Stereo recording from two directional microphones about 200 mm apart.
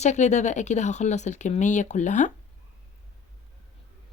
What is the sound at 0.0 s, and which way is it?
Speech, 35° left (ahead or behind).